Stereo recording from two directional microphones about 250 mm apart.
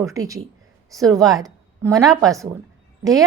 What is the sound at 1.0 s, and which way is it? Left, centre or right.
Speech, centre.